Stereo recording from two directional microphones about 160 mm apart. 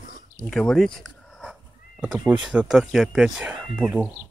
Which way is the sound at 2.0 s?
10° right (ahead or behind).